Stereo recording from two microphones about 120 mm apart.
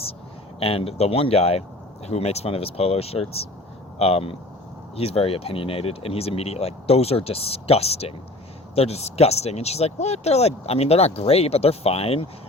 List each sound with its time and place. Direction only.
0.6 s speech: 55° left (ahead or behind)